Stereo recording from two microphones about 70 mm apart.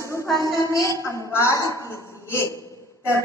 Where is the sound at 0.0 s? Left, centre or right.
Left.